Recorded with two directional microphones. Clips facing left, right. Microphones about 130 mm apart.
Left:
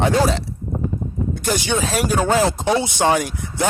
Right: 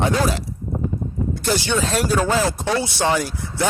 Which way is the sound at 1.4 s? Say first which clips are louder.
Even; 15° left (ahead or behind).